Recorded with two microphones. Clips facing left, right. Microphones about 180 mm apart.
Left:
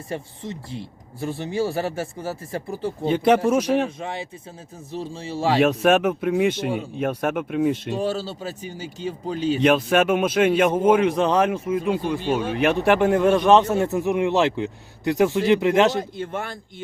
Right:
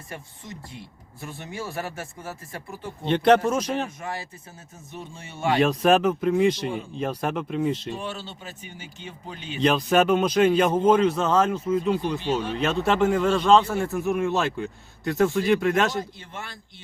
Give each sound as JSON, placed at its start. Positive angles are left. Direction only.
{"t": 0.1, "sound": "speech", "side_deg": 30}
{"t": 3.1, "sound": "a man's voice", "side_deg": 5}
{"t": 3.8, "sound": "speech", "side_deg": 25}
{"t": 5.5, "sound": "a man's voice", "side_deg": 5}
{"t": 6.6, "sound": "a man's voice", "side_deg": 65}
{"t": 7.0, "sound": "a man's voice", "side_deg": 10}
{"t": 7.9, "sound": "speech", "side_deg": 35}
{"t": 9.6, "sound": "a man's voice", "side_deg": 5}
{"t": 12.4, "sound": "speech", "side_deg": 50}
{"t": 12.6, "sound": "speech", "side_deg": 15}
{"t": 16.0, "sound": "a man's voice", "side_deg": 55}